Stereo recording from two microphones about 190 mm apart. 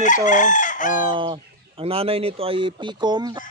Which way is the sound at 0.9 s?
25° right (ahead or behind).